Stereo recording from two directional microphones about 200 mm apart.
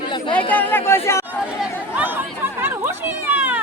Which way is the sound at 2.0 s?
10° right (ahead or behind).